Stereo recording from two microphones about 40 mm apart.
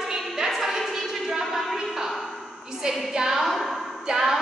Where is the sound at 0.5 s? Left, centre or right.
Centre.